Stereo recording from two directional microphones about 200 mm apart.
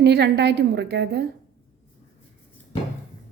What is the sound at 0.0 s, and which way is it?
A woman's voice, 55° right (ahead or behind).